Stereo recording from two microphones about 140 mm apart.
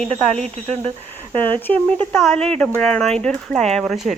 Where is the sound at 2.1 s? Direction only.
5° left (ahead or behind).